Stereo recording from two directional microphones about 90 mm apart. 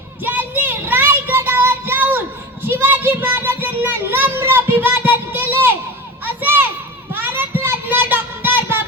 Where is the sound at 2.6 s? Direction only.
25° right (ahead or behind).